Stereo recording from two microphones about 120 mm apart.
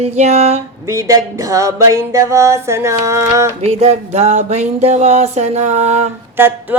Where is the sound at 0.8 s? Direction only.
25° right (ahead or behind).